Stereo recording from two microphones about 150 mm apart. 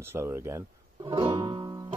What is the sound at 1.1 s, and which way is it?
Music, 35° right (ahead or behind).